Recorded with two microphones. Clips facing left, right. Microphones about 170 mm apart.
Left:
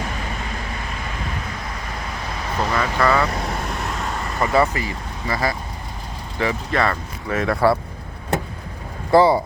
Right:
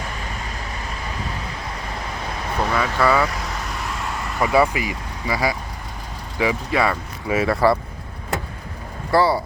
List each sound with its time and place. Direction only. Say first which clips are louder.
2.6 s speech: even; centre (ahead or behind)
4.4 s speech: right 1 dB; 5° right (ahead or behind)
9.1 s speech: left 4 dB; 20° left (ahead or behind)